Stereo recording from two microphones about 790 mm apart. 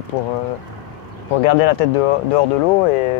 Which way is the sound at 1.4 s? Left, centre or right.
Left.